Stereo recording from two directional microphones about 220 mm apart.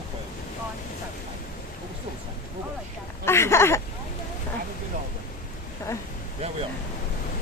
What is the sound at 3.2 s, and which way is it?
Speech, 10° left (ahead or behind).